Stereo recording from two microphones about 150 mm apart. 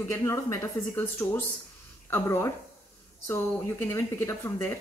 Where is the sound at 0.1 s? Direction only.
20° left (ahead or behind).